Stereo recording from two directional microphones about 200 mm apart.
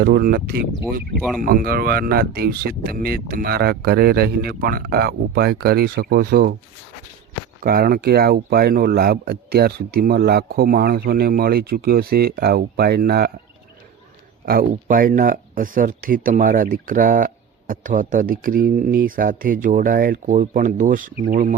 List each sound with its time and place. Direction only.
0.0 s speech: 50° right (ahead or behind)
7.6 s speech: 45° right (ahead or behind)
14.4 s speech: 45° right (ahead or behind)